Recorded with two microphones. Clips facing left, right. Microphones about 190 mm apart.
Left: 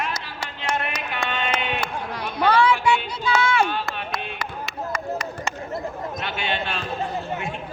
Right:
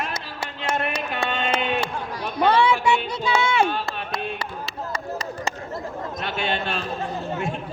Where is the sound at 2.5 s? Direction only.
25° right (ahead or behind).